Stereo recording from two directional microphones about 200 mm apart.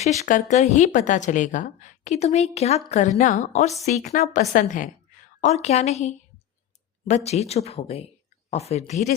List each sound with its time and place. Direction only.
0.0 s speech: 35° left (ahead or behind)